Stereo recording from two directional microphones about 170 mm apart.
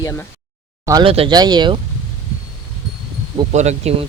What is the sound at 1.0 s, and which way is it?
Speech, 35° right (ahead or behind).